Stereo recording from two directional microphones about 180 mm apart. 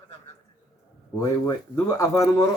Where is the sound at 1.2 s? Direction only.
15° left (ahead or behind).